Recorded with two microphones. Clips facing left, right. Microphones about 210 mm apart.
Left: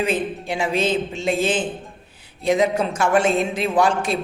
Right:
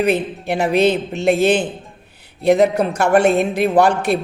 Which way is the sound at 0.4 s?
65° right (ahead or behind).